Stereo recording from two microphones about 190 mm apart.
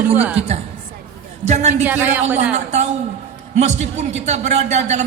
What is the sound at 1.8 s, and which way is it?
Speech, 10° right (ahead or behind).